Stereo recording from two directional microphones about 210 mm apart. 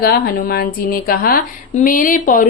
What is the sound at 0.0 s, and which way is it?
A woman's voice, 45° left (ahead or behind).